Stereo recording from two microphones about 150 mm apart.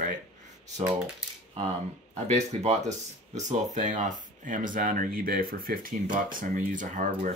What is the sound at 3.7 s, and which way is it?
Speech, 55° right (ahead or behind).